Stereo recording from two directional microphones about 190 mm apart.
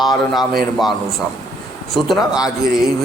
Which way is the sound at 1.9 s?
Centre (ahead or behind).